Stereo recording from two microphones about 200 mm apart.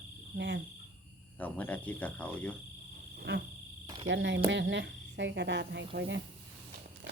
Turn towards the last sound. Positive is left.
turn(degrees=-55)  # may be behind; listen again after turning